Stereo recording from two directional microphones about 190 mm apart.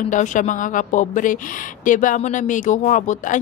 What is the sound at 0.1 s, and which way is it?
Speech, 40° left (ahead or behind).